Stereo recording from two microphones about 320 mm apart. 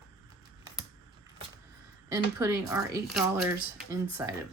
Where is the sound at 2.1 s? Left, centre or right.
Centre.